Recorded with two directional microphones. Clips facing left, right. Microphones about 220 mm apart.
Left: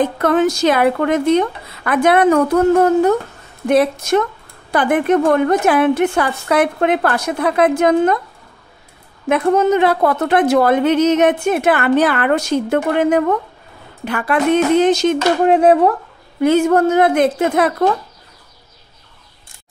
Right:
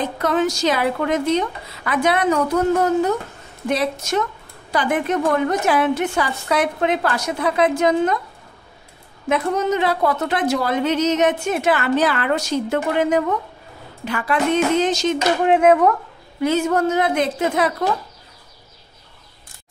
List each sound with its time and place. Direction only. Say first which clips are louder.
0.0 s a woman's voice: left 5 dB; 55° left (ahead or behind)
9.3 s a woman's voice: left 6 dB; 55° left (ahead or behind)
15.4 s speech: left 3 dB; 35° left (ahead or behind)
16.3 s a woman's voice: left 6 dB; 55° left (ahead or behind)